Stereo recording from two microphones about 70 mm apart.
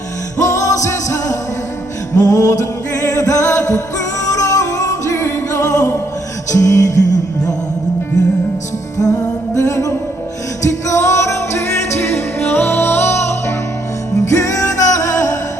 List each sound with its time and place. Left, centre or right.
0.3 s music: left
9.0 s music: left